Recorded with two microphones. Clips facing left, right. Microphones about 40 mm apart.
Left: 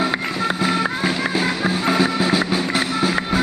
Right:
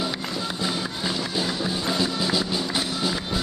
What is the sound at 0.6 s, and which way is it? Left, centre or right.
Music, left.